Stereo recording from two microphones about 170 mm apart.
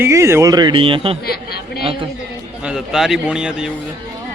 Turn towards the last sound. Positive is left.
turn(degrees=-5)  # may be behind; listen again after turning